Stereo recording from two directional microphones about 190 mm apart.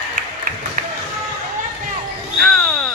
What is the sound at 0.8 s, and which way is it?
Basketball bounce, 45° right (ahead or behind).